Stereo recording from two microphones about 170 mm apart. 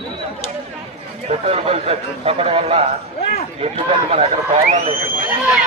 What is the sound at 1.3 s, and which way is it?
A man's voice, 35° right (ahead or behind).